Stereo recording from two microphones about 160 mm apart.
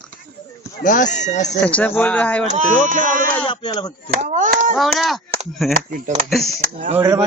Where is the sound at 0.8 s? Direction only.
55° left (ahead or behind).